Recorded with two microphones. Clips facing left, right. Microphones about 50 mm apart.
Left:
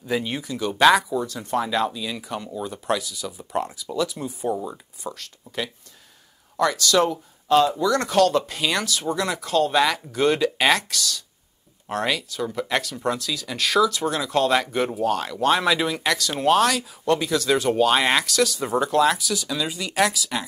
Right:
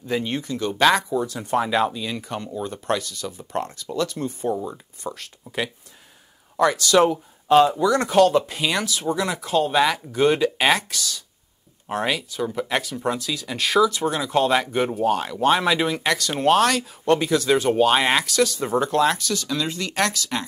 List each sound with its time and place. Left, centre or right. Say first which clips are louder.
0.0 s speech: right 1 dB; centre
5.1 s speech: right 2 dB; centre